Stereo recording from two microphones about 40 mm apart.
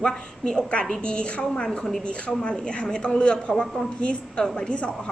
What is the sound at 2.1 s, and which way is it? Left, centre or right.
A woman's voice, left.